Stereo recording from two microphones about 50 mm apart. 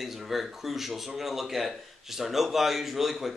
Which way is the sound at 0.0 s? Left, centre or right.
Centre.